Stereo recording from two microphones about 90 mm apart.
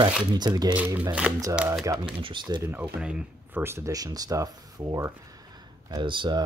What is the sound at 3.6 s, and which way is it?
Speech, 30° right (ahead or behind).